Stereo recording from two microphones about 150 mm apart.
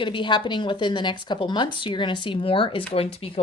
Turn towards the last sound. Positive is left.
turn(degrees=40)  # may be behind; listen again after turning